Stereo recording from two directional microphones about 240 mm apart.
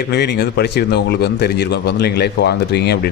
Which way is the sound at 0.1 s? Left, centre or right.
Left.